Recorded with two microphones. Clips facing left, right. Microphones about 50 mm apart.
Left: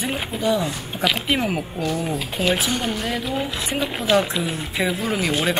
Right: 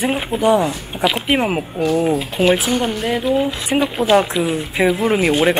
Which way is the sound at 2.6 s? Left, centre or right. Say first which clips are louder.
Right 5 dB; right.